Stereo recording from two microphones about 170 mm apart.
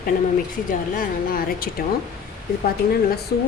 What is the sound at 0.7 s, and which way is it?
A woman's voice, 55° left (ahead or behind).